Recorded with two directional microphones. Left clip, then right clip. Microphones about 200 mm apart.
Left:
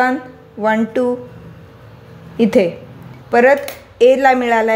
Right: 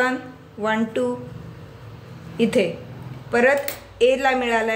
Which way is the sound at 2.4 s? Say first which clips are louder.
Left 6 dB; 35° left (ahead or behind).